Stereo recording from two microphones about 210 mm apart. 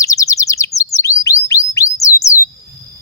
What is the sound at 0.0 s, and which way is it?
Bird, 15° left (ahead or behind).